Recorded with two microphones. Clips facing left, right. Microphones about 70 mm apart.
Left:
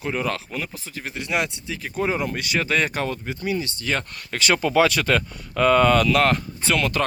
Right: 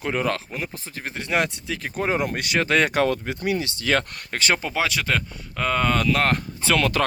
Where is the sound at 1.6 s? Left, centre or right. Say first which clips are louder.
Right 2 dB; right.